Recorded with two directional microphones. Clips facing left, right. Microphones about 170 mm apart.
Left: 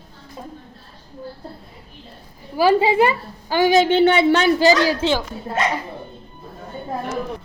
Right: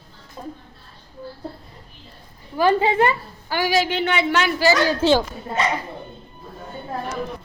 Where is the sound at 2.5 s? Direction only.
10° left (ahead or behind); by 4.6 s 30° left (ahead or behind).